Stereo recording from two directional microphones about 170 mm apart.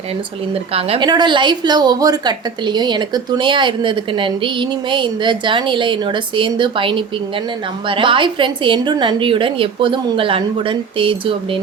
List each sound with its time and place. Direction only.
0.7 s a woman's voice: 35° right (ahead or behind)